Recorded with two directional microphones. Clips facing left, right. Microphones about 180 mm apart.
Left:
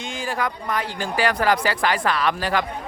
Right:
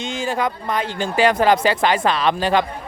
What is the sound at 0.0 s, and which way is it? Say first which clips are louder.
Speech: right 4 dB; 25° right (ahead or behind).